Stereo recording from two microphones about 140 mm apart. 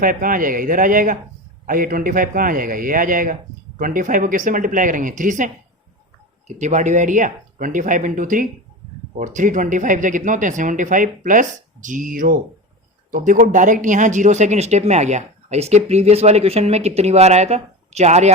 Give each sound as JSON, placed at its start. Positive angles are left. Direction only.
{"t": 0.0, "sound": "speech", "side_deg": -75}
{"t": 1.6, "sound": "a man's voice", "side_deg": -85}
{"t": 6.5, "sound": "speech", "side_deg": -60}